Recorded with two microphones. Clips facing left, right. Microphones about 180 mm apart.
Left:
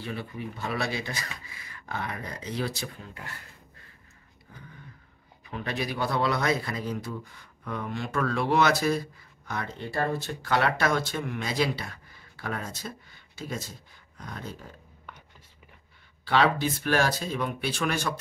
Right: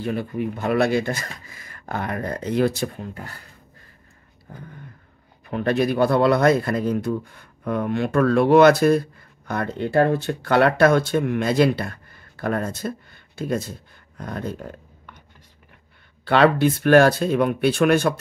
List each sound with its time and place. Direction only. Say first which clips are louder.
0.0 s speech: right 10 dB; 50° right (ahead or behind)
4.5 s speech: right 10 dB; 45° right (ahead or behind)
5.4 s speech: right 11 dB; 55° right (ahead or behind)
16.3 s speech: right 7 dB; 60° right (ahead or behind)